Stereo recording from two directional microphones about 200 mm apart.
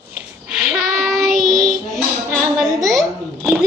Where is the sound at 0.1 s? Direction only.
5° right (ahead or behind).